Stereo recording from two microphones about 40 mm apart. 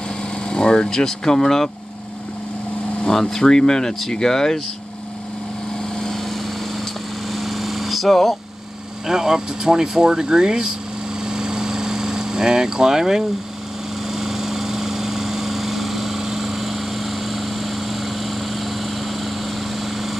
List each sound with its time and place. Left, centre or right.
0.5 s speech: left
3.1 s speech: centre
5.9 s vehicle: centre
9.0 s speech: centre
11.1 s vehicle: centre